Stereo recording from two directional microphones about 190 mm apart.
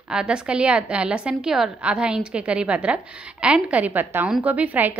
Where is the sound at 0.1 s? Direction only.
5° right (ahead or behind).